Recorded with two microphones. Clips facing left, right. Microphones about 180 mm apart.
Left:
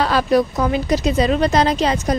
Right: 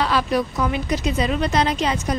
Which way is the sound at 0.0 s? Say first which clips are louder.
Left 5 dB; 40° left (ahead or behind).